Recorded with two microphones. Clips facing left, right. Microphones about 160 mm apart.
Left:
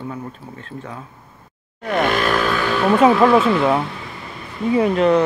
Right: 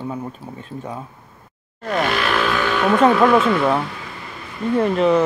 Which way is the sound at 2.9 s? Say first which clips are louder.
Left 1 dB; centre (ahead or behind).